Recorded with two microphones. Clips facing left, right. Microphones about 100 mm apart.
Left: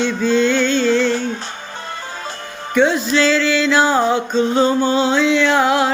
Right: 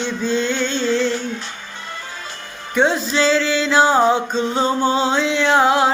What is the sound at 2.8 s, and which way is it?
Music, 30° right (ahead or behind).